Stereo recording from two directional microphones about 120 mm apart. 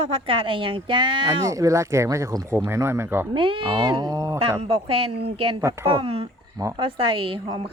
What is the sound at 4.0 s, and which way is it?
Speech, 30° right (ahead or behind).